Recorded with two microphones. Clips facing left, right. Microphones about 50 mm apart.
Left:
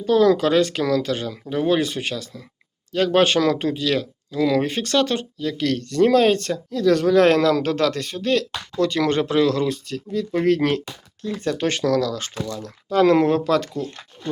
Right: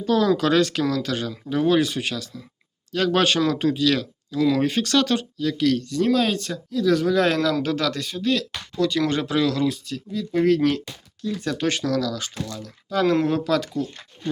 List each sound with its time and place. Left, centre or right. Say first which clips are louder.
0.0 s speech: left 3 dB; left
5.5 s speech: left 3 dB; left